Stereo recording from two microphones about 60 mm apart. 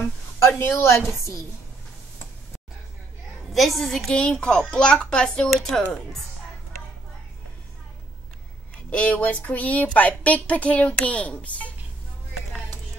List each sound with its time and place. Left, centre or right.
0.0 s a woman's voice: left
3.5 s a woman's voice: centre
4.1 s a child's voice: centre
5.5 s a woman's voice: centre
8.9 s speech: left